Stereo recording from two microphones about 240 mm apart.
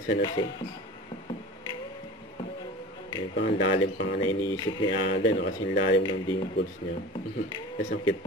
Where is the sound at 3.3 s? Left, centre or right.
Left.